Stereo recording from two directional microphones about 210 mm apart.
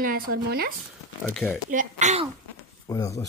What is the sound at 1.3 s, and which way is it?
Speech, centre (ahead or behind).